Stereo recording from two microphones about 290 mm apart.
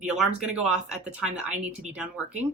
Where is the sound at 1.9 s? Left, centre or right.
Centre.